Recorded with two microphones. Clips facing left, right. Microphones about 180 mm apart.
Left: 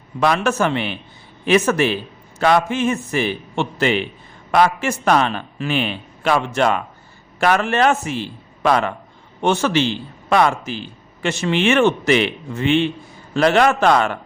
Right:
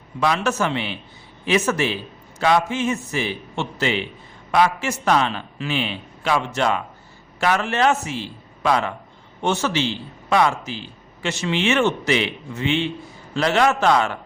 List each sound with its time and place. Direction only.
0.2 s a man's voice: 55° left (ahead or behind)